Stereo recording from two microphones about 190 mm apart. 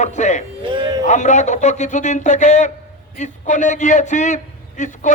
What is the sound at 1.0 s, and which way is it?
A man's voice, 40° left (ahead or behind).